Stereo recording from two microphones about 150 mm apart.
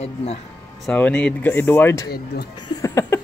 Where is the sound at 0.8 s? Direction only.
10° left (ahead or behind).